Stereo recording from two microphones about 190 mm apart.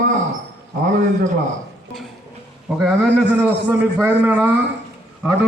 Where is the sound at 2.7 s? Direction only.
Centre (ahead or behind).